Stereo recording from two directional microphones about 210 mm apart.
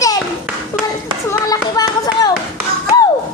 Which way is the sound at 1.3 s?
15° left (ahead or behind).